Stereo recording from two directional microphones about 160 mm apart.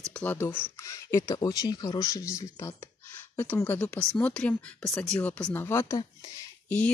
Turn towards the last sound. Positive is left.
turn(degrees=10)  # may be behind; listen again after turning